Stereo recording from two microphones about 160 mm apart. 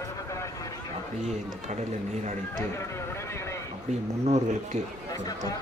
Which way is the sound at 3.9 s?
45° right (ahead or behind).